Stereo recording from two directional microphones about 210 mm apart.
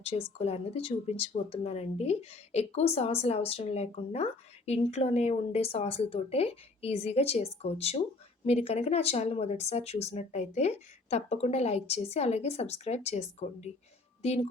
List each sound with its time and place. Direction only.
0.0 s speech: 30° left (ahead or behind)